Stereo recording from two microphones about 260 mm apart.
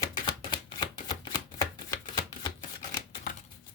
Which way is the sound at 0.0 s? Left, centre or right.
Centre.